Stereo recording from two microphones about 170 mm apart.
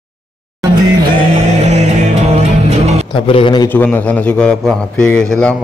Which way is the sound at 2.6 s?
40° right (ahead or behind).